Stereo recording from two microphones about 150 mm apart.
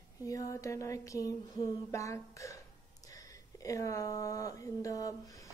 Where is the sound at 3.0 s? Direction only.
20° left (ahead or behind).